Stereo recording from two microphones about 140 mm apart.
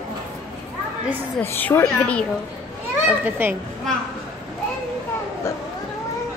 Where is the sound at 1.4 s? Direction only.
10° left (ahead or behind).